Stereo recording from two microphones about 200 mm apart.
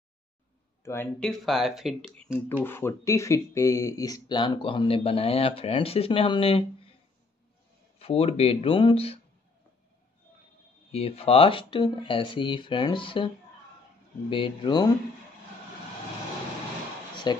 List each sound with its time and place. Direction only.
0.8 s speech: 5° left (ahead or behind)
2.6 s speech: 10° left (ahead or behind); by 6.6 s 25° left (ahead or behind)
8.0 s speech: 30° left (ahead or behind)
10.9 s speech: 30° left (ahead or behind)
14.3 s speech: 25° left (ahead or behind)
17.3 s speech: 20° left (ahead or behind)